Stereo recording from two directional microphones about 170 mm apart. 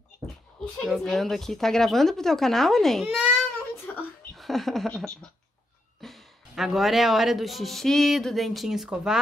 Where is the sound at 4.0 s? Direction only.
Centre (ahead or behind).